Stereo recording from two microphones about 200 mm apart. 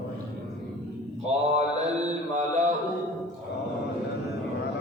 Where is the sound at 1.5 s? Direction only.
35° right (ahead or behind).